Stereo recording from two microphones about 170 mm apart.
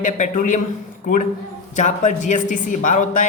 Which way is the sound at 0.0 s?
50° left (ahead or behind).